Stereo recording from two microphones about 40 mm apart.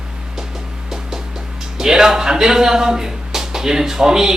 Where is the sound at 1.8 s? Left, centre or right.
Centre.